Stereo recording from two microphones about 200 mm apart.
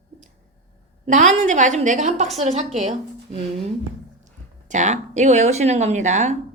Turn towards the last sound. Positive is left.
turn(degrees=-35)  # may be behind; listen again after turning